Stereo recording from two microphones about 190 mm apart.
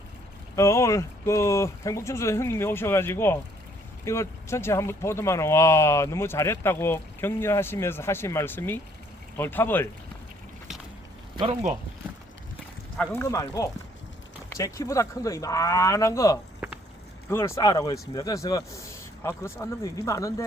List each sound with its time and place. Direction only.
0.5 s speech: 15° left (ahead or behind)
11.3 s speech: 30° right (ahead or behind)
13.0 s speech: 15° left (ahead or behind)